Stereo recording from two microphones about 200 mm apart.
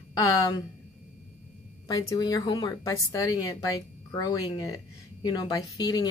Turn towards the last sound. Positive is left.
turn(degrees=20)  # may be behind; listen again after turning